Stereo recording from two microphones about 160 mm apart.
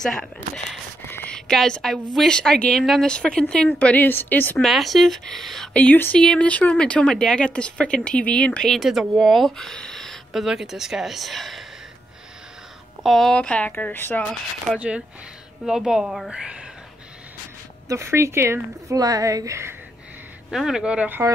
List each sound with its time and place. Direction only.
0.0 s a sound: 5° left (ahead or behind)
1.1 s speech: 5° left (ahead or behind)
4.6 s speech: centre (ahead or behind)
13.0 s speech: centre (ahead or behind)
14.7 s speech: 5° right (ahead or behind)
17.8 s speech: 20° right (ahead or behind)
20.5 s speech: 5° right (ahead or behind)